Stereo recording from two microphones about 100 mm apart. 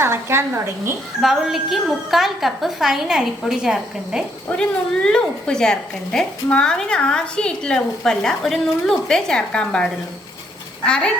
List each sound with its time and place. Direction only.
0.0 s a woman's voice: 25° right (ahead or behind)
1.2 s a woman's voice: 5° right (ahead or behind)
5.0 s a woman's voice: 10° left (ahead or behind)